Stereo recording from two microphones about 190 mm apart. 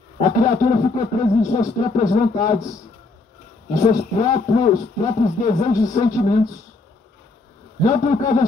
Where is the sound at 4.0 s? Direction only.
40° left (ahead or behind).